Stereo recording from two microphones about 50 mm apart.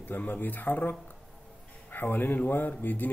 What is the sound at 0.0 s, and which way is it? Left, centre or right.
A man's voice, left.